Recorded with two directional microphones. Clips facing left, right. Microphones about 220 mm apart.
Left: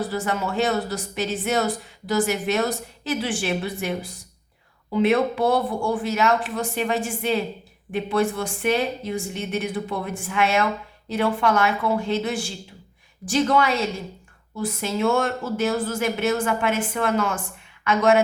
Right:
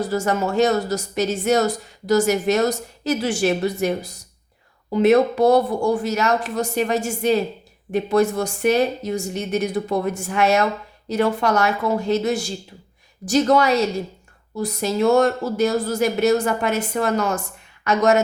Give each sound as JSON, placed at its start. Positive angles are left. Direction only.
{"t": 0.0, "sound": "a woman's voice", "side_deg": -45}